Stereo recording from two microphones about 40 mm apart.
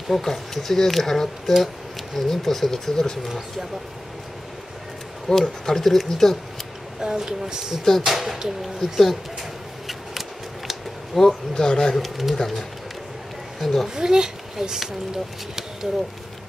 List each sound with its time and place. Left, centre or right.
0.1 s speech: centre
3.3 s speech: centre
5.3 s speech: centre
7.0 s speech: centre
8.0 s speech: centre
11.1 s speech: centre
11.9 s speech: centre
13.8 s speech: centre